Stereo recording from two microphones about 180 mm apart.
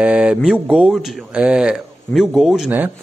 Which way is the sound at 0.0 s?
5° right (ahead or behind).